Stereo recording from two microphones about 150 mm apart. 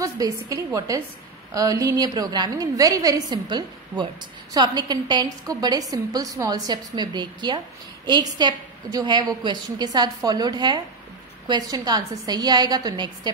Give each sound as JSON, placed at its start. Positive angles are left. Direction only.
{"t": 0.0, "sound": "a woman's voice", "side_deg": -20}